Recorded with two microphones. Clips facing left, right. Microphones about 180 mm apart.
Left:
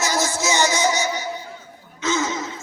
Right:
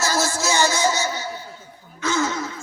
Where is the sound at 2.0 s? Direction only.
20° left (ahead or behind).